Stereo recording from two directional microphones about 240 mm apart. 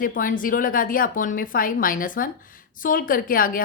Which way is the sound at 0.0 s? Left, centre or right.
Left.